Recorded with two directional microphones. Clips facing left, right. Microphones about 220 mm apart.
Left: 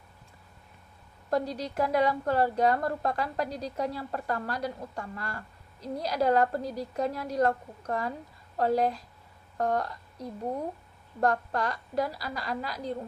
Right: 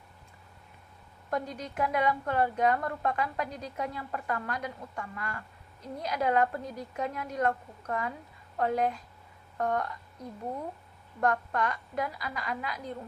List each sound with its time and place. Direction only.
1.3 s a woman's voice: 35° left (ahead or behind)
11.2 s a woman's voice: 35° left (ahead or behind)